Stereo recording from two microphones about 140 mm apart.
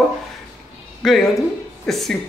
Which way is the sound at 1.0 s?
Centre (ahead or behind).